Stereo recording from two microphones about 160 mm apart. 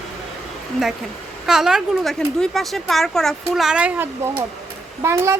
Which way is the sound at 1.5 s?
5° right (ahead or behind).